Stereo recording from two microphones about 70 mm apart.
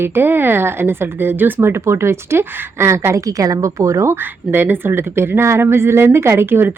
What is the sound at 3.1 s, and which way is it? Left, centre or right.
A woman's voice, right.